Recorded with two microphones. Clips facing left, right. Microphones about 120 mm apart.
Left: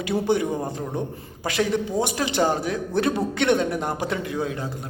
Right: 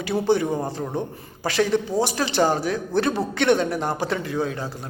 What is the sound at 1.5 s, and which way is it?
A man's voice, 15° left (ahead or behind).